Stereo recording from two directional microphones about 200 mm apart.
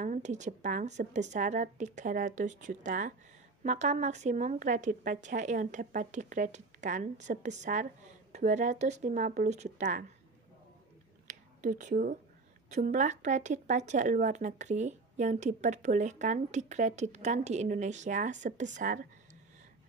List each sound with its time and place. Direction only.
0.0 s speech: 40° right (ahead or behind)
11.2 s a sound: 40° right (ahead or behind)
12.6 s speech: 35° right (ahead or behind)